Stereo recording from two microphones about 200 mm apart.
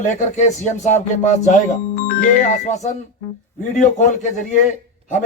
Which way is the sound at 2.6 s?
35° left (ahead or behind).